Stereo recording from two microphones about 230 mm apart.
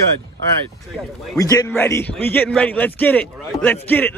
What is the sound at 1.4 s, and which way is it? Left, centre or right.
Speech, centre.